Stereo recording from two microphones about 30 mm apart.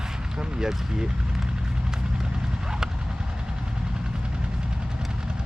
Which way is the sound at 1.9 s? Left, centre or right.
Right.